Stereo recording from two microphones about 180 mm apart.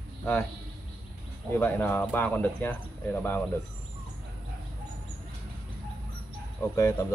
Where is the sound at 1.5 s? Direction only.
10° left (ahead or behind).